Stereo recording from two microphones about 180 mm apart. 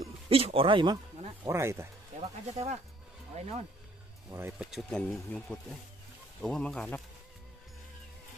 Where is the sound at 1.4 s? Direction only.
15° right (ahead or behind).